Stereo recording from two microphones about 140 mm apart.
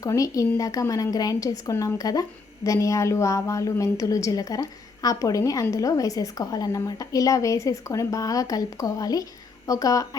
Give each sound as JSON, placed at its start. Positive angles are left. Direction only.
{"t": 0.0, "sound": "a woman's voice", "side_deg": 25}